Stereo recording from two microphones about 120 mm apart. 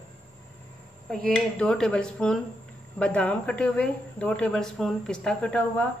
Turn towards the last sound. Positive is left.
turn(degrees=10)  # may be behind; listen again after turning